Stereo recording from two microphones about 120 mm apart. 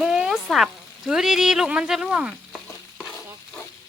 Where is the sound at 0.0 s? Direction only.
5° right (ahead or behind).